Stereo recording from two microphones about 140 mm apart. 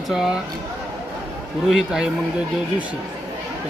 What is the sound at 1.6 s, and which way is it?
Speech, 5° right (ahead or behind).